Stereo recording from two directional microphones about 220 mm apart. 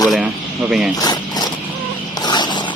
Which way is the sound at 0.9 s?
15° left (ahead or behind).